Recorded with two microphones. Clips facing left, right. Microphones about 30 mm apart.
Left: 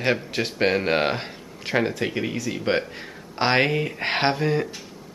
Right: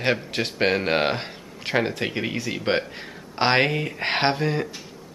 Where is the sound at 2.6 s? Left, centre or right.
Centre.